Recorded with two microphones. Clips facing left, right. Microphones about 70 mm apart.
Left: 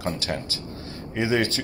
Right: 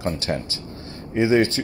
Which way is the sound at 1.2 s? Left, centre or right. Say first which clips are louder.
Right 5 dB; right.